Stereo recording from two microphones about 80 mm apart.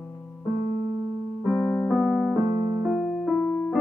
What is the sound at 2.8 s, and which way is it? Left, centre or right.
Music, centre.